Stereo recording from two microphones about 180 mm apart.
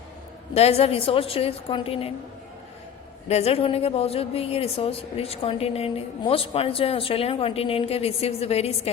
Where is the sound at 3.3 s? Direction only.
35° left (ahead or behind).